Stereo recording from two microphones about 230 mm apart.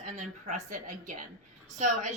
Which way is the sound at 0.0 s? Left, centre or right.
Right.